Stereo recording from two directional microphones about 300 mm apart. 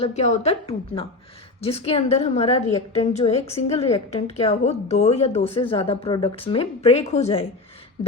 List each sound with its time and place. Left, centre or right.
0.0 s a woman's voice: left